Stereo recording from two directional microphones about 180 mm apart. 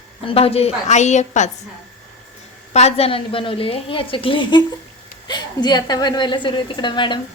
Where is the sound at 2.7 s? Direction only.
35° left (ahead or behind).